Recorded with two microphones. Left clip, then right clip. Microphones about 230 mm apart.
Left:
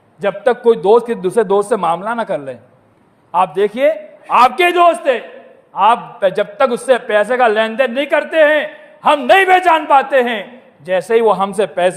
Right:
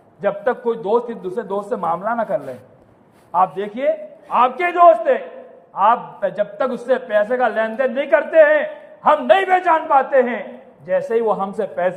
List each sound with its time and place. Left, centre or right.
0.2 s a man's voice: left